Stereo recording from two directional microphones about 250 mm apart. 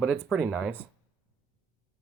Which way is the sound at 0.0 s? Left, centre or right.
Centre.